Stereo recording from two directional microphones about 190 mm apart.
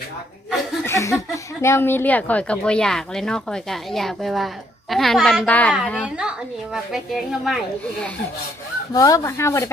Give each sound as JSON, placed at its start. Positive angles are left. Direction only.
{"t": 0.9, "sound": "a sound", "side_deg": 15}
{"t": 1.3, "sound": "a woman's voice", "side_deg": 15}
{"t": 8.9, "sound": "speech", "side_deg": 15}